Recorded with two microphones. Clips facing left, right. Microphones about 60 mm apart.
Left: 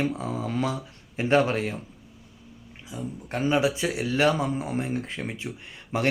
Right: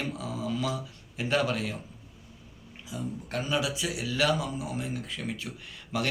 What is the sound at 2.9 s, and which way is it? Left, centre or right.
Speech, left.